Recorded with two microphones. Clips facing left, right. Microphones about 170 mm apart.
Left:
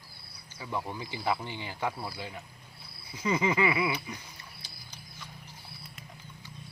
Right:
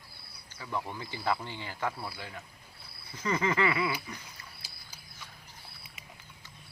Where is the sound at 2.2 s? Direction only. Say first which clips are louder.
Left 3 dB; 15° left (ahead or behind).